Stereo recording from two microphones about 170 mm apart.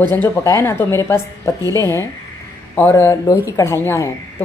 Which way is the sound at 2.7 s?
15° left (ahead or behind).